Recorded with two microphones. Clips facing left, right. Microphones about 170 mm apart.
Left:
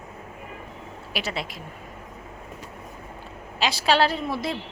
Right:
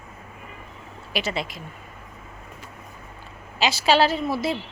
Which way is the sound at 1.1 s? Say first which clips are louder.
Right 3 dB; centre (ahead or behind).